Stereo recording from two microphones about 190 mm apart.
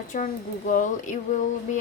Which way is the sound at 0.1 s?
40° left (ahead or behind).